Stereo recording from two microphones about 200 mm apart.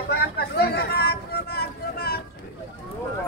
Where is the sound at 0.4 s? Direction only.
55° left (ahead or behind).